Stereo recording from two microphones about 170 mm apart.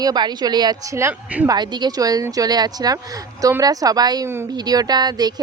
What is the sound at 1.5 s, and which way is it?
Speech, 25° right (ahead or behind).